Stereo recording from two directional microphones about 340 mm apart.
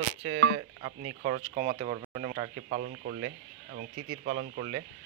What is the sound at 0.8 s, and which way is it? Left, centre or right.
Speech, right.